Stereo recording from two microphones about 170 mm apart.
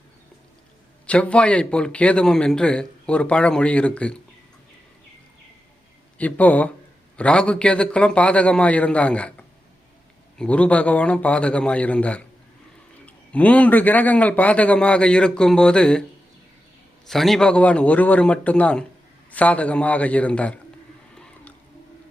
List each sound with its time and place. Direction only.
1.0 s a man's voice: 5° left (ahead or behind)
6.1 s a man's voice: 10° left (ahead or behind)
10.3 s a man's voice: 5° left (ahead or behind)
17.1 s a man's voice: centre (ahead or behind)